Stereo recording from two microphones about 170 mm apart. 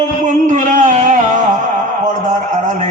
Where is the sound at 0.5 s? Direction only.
50° right (ahead or behind).